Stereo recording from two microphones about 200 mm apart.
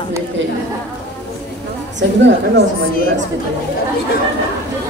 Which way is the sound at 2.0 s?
65° right (ahead or behind).